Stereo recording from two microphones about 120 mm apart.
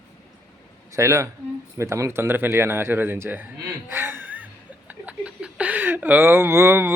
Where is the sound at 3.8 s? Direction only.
20° right (ahead or behind).